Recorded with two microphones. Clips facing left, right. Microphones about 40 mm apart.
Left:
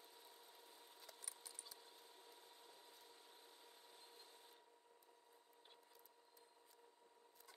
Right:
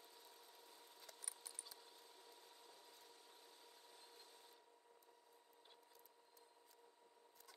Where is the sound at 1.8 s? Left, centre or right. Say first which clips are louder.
Even; left.